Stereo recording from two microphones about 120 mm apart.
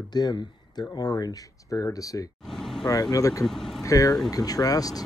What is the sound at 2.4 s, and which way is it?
Vehicle, 5° left (ahead or behind).